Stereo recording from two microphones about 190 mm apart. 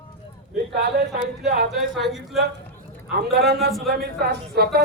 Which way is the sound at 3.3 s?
55° right (ahead or behind).